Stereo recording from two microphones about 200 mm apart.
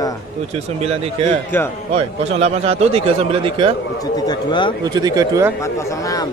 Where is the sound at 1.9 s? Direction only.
30° right (ahead or behind).